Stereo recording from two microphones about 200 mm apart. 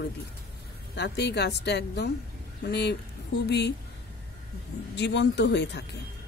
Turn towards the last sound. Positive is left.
turn(degrees=60)  # may be behind; listen again after turning